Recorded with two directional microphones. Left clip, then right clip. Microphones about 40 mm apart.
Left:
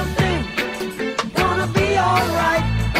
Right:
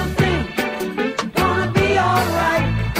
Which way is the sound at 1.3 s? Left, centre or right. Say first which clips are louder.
Right 1 dB; left.